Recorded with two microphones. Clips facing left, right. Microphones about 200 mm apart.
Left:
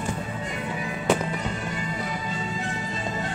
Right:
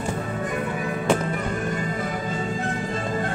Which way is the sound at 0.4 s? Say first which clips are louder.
Right 5 dB; 55° right (ahead or behind).